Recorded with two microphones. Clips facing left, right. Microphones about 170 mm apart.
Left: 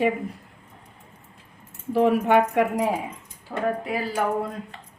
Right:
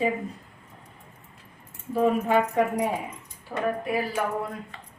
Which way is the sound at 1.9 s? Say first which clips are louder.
Left 3 dB; 70° left (ahead or behind).